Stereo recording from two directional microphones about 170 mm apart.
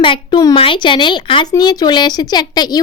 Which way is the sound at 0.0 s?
30° left (ahead or behind).